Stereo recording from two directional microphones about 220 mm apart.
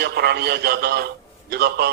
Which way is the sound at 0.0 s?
45° right (ahead or behind).